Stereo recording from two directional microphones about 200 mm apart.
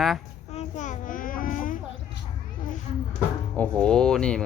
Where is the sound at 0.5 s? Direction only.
35° left (ahead or behind).